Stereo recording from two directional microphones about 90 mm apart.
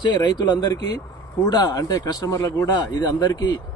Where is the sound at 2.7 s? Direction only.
50° left (ahead or behind).